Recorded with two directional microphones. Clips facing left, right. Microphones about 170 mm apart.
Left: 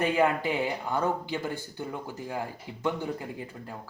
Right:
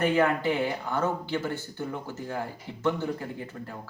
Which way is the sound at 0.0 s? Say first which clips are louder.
Right 1 dB; 15° left (ahead or behind).